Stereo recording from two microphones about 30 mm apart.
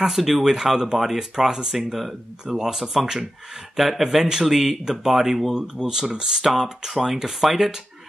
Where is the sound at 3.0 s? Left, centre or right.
Centre.